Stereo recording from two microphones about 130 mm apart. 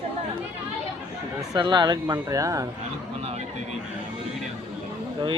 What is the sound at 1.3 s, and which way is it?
Speech, 30° right (ahead or behind).